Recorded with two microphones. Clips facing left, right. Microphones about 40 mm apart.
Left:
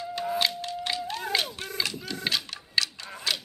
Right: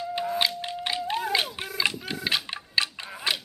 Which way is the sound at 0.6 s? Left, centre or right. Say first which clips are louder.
Right 1 dB; right.